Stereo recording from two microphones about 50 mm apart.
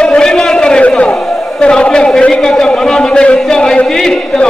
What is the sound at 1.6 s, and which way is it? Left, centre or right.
A man's voice, centre.